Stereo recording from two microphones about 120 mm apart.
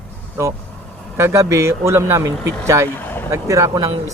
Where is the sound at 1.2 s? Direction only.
20° right (ahead or behind).